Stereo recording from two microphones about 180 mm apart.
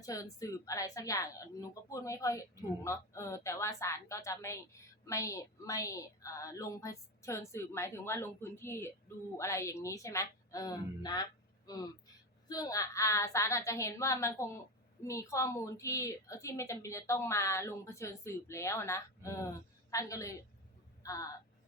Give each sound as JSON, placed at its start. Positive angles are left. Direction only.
{"t": 0.0, "sound": "a woman's voice", "side_deg": 20}